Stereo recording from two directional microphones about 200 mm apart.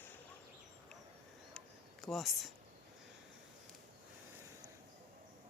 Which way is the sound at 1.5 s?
Centre (ahead or behind).